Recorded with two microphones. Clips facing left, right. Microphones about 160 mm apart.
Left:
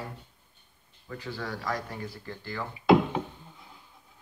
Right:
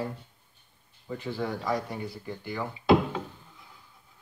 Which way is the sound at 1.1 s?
20° right (ahead or behind).